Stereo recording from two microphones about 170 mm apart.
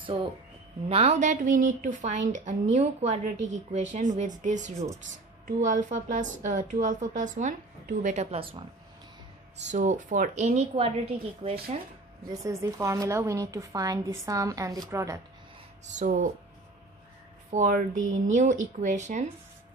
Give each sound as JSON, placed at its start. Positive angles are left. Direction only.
{"t": 0.0, "sound": "a woman's voice", "side_deg": -30}
{"t": 9.7, "sound": "a woman's voice", "side_deg": -45}
{"t": 12.4, "sound": "speech", "side_deg": -20}
{"t": 15.8, "sound": "a woman's voice", "side_deg": -50}
{"t": 17.5, "sound": "a woman's voice", "side_deg": -50}